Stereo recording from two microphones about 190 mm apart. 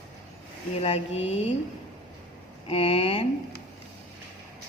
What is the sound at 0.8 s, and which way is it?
Speech, 30° left (ahead or behind).